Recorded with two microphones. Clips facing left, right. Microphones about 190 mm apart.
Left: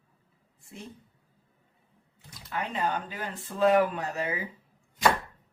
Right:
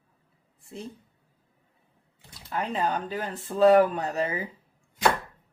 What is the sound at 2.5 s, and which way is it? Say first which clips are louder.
Speech: right 3 dB; 35° right (ahead or behind).